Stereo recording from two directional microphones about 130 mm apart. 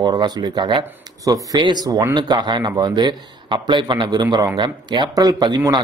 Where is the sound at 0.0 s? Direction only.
35° right (ahead or behind).